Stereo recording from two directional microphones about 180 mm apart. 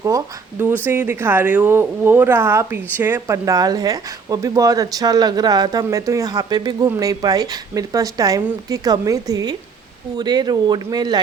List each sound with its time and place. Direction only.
0.9 s a woman's voice: 10° right (ahead or behind)